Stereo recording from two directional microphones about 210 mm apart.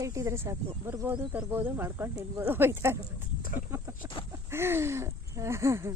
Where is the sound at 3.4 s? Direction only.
40° left (ahead or behind).